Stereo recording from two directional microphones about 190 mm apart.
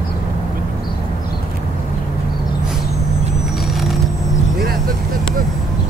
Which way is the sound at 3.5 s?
Centre (ahead or behind).